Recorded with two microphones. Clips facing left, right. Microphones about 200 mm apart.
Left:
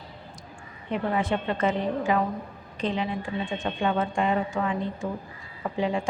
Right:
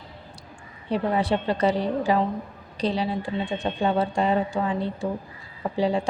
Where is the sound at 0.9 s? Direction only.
35° right (ahead or behind).